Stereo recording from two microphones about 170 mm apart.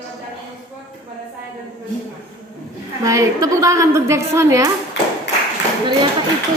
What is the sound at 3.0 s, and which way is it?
A woman's voice, 20° right (ahead or behind).